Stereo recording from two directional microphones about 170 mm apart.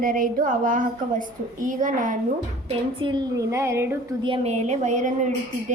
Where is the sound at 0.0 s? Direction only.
55° right (ahead or behind).